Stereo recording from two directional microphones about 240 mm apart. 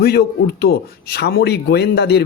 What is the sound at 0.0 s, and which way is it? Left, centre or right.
Speech, left.